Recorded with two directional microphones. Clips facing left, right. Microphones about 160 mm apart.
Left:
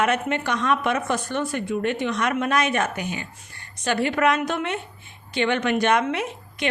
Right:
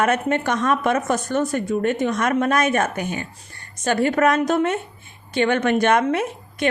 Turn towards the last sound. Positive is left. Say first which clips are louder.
# right 4 dB
turn(degrees=-50)  # may be behind; listen again after turning